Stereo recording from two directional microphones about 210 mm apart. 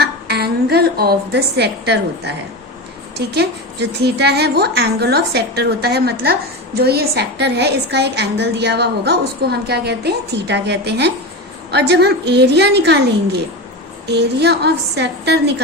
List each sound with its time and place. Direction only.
0.0 s a woman's voice: 50° right (ahead or behind)